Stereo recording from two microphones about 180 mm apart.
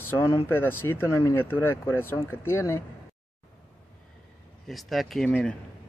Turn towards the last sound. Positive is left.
turn(degrees=5)  # may be behind; listen again after turning